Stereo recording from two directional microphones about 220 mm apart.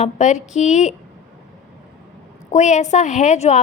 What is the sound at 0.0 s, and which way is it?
Speech, 30° left (ahead or behind).